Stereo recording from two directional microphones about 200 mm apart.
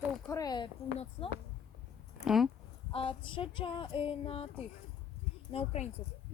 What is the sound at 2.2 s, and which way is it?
Speech, centre (ahead or behind).